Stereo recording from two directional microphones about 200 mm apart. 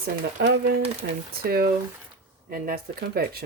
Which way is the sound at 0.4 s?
55° right (ahead or behind).